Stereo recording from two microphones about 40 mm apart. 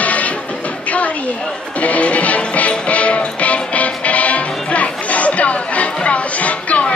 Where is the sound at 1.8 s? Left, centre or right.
Left.